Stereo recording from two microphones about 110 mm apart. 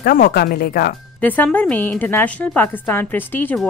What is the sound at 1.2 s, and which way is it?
Speech, 15° left (ahead or behind).